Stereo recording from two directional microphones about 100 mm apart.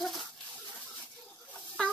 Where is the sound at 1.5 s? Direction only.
5° left (ahead or behind).